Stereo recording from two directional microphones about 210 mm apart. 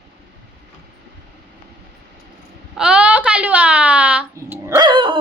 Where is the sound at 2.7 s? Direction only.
5° right (ahead or behind).